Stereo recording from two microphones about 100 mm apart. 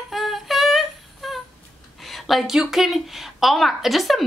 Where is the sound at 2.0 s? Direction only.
Centre (ahead or behind).